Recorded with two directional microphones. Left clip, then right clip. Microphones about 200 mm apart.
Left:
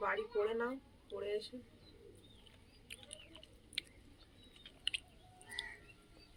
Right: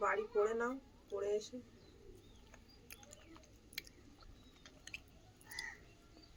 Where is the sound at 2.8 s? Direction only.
15° right (ahead or behind).